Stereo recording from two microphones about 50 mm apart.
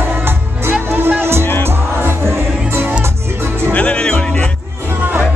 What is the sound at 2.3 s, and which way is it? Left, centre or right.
Music, right.